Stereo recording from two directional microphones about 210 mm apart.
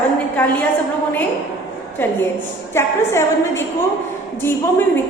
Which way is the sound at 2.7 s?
10° left (ahead or behind).